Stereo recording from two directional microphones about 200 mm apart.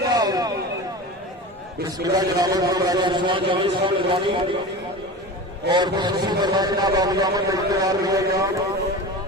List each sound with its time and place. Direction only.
0.0 s a sound: 20° right (ahead or behind)
2.1 s a man's voice: 20° right (ahead or behind)
5.7 s a man's voice: 20° right (ahead or behind)